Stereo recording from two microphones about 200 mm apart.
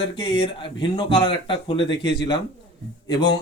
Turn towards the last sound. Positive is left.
turn(degrees=20)  # may be behind; listen again after turning